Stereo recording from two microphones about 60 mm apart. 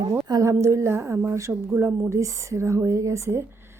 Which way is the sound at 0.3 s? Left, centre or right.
Right.